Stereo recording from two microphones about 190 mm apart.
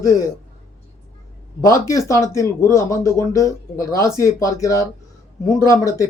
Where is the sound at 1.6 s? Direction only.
15° left (ahead or behind).